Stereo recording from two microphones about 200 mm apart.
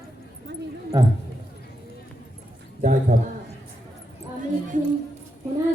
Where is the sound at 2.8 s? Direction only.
40° right (ahead or behind).